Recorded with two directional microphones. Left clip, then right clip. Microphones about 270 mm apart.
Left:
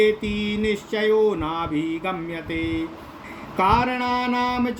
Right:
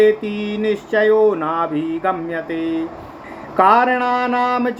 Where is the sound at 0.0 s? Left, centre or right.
Left.